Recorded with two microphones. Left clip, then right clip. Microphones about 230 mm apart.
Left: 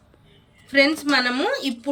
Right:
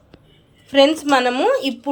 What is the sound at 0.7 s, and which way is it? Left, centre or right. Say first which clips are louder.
A woman's voice: right 4 dB; centre.